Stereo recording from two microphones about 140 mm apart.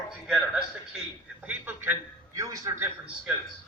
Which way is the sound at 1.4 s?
10° right (ahead or behind).